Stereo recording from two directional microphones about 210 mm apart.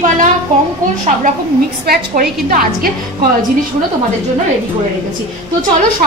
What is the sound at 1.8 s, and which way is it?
A woman's voice, 45° right (ahead or behind).